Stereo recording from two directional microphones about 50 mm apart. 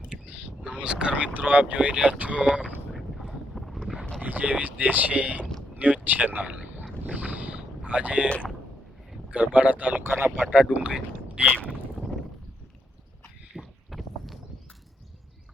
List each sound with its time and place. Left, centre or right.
0.1 s speech: right
2.9 s boat: centre
4.2 s speech: right
7.0 s boat: right
9.3 s speech: right
10.0 s a man's voice: right
10.4 s speech: right
13.6 s boat: centre